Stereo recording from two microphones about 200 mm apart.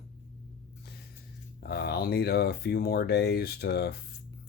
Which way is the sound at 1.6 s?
50° left (ahead or behind).